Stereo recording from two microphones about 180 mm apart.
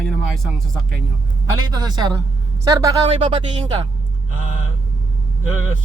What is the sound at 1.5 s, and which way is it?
A woman's voice, 20° right (ahead or behind).